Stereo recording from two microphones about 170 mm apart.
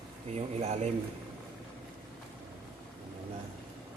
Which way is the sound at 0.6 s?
40° right (ahead or behind).